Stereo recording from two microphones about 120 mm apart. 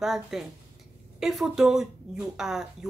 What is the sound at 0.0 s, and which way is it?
Speech, 5° right (ahead or behind).